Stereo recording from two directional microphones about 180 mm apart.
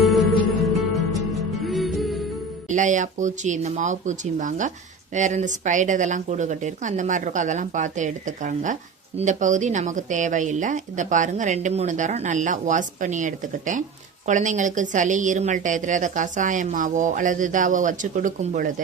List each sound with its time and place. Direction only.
0.0 s music: centre (ahead or behind)
1.6 s music: centre (ahead or behind)
2.6 s a woman's voice: 45° right (ahead or behind)